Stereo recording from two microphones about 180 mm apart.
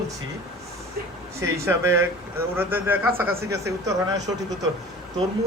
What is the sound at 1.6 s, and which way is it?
A man's voice, 15° right (ahead or behind).